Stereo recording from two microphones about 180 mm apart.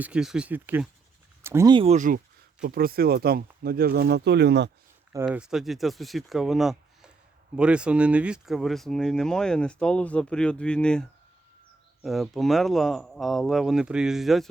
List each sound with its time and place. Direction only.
0.0 s speech: 5° right (ahead or behind)
1.7 s speech: 35° right (ahead or behind); by 4.7 s 70° right (ahead or behind)
5.2 s speech: 5° right (ahead or behind)
12.0 s speech: centre (ahead or behind)